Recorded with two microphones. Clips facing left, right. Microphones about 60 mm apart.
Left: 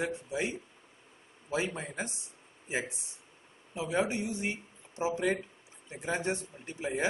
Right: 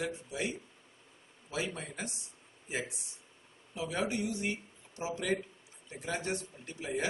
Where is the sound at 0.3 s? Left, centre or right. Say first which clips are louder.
Left 3 dB; left.